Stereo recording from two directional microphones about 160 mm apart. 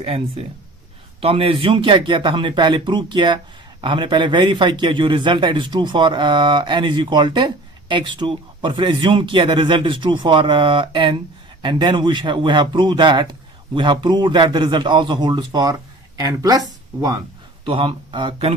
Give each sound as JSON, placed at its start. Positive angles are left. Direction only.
{"t": 0.0, "sound": "a man's voice", "side_deg": -40}
{"t": 17.7, "sound": "speech", "side_deg": -35}